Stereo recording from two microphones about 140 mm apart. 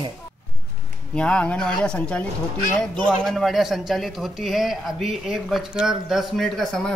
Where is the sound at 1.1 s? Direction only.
10° left (ahead or behind).